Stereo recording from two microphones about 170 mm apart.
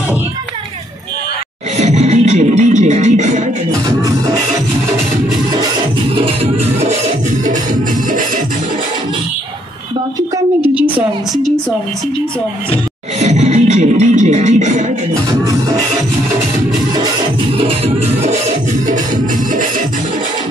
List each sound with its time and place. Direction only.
1.8 s music: 40° right (ahead or behind)
6.1 s music: 35° right (ahead or behind)
10.3 s a sound: 10° right (ahead or behind)
13.2 s music: 40° right (ahead or behind)
17.6 s music: 35° right (ahead or behind)